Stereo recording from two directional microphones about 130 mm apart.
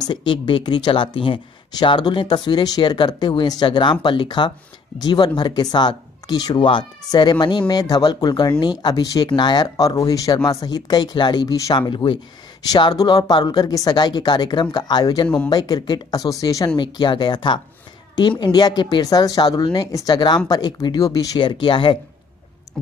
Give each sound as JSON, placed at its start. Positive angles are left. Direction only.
{"t": 0.0, "sound": "speech", "side_deg": 35}
{"t": 11.9, "sound": "speech", "side_deg": 40}
{"t": 15.2, "sound": "speech", "side_deg": 10}
{"t": 15.5, "sound": "speech", "side_deg": 30}
{"t": 21.5, "sound": "speech", "side_deg": 40}